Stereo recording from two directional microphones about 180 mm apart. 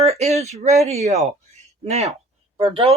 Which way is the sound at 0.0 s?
35° right (ahead or behind).